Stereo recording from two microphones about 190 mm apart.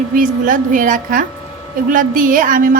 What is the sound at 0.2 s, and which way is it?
A woman's voice, 45° right (ahead or behind).